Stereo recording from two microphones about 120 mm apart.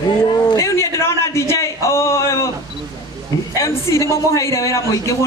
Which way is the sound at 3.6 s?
25° left (ahead or behind).